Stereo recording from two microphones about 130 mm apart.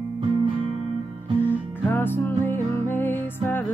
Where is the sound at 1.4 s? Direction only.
15° left (ahead or behind).